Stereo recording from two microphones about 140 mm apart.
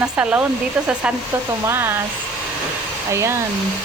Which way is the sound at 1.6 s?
15° right (ahead or behind).